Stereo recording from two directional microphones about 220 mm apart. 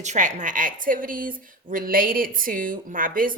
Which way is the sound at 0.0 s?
35° right (ahead or behind).